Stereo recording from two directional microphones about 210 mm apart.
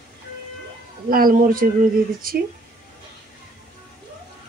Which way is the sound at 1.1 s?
40° right (ahead or behind).